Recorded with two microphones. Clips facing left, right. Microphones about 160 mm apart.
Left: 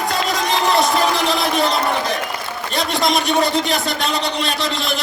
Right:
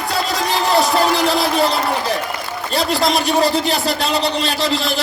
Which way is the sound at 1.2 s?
Centre (ahead or behind).